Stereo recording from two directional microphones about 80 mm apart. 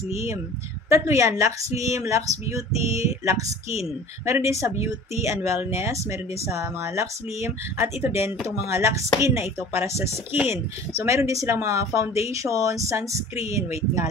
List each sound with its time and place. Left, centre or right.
0.1 s speech: right
10.3 s speech: right
10.9 s speech: right